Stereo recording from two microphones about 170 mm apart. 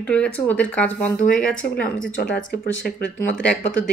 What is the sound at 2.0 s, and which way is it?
Speech, 60° left (ahead or behind).